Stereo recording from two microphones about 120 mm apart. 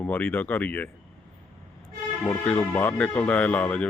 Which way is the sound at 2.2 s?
10° left (ahead or behind).